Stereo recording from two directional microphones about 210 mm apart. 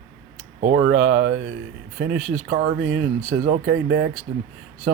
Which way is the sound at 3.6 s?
55° right (ahead or behind).